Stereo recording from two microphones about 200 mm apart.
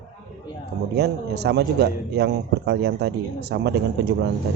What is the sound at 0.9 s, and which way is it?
A man's voice, 55° right (ahead or behind).